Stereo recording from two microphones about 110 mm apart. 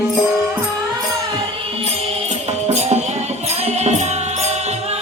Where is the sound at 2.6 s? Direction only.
85° right.